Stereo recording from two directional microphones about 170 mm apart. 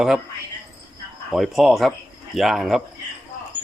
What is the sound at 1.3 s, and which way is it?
Speech, centre (ahead or behind).